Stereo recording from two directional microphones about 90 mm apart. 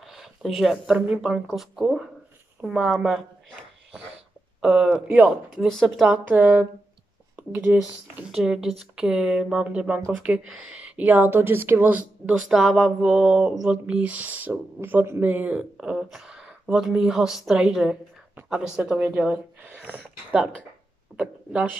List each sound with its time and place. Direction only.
0.0 s a sound: 5° right (ahead or behind)
0.9 s speech: 10° right (ahead or behind)
4.6 s speech: 10° right (ahead or behind)
5.7 s speech: centre (ahead or behind)
6.2 s speech: 20° right (ahead or behind)
8.3 s speech: 5° right (ahead or behind)
12.4 s speech: 5° right (ahead or behind)
13.8 s speech: 15° right (ahead or behind)
15.8 s speech: 5° right (ahead or behind)